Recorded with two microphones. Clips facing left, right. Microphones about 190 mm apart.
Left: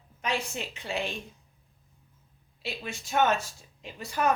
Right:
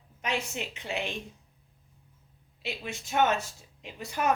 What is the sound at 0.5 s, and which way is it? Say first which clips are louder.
Speech: left 1 dB; 20° right (ahead or behind).